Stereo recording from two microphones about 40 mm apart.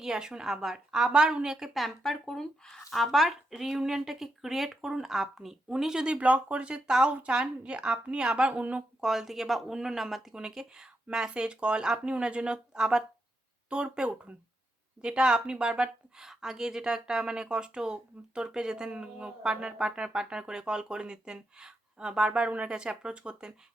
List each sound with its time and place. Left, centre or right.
0.0 s speech: centre
1.7 s speech: centre
3.5 s speech: centre
5.6 s speech: centre
6.1 s speech: right
6.7 s speech: right
9.0 s speech: centre
10.3 s speech: centre
16.1 s speech: centre